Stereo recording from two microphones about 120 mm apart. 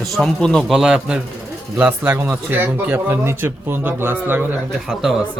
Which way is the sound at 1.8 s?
20° right (ahead or behind).